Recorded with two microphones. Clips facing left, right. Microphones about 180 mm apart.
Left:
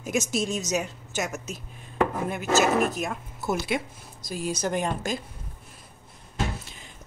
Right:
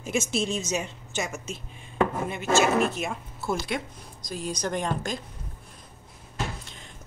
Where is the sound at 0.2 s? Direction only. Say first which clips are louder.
Even; 40° left (ahead or behind).